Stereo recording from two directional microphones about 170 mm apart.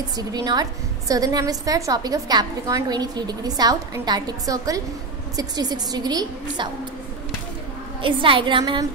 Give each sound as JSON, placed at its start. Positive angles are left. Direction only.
{"t": 0.2, "sound": "a woman's voice", "side_deg": -20}
{"t": 8.0, "sound": "a woman's voice", "side_deg": -30}